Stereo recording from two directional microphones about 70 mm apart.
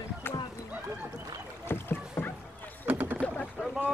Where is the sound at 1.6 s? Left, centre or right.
Left.